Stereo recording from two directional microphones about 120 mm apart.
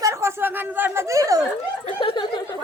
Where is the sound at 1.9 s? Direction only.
45° left (ahead or behind).